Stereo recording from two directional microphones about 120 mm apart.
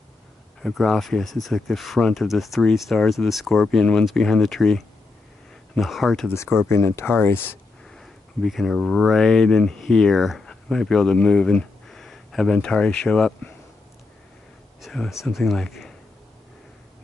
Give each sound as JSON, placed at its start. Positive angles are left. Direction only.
{"t": 0.6, "sound": "speech", "side_deg": 5}
{"t": 6.2, "sound": "speech", "side_deg": 20}
{"t": 7.9, "sound": "speech", "side_deg": 5}
{"t": 14.8, "sound": "speech", "side_deg": 0}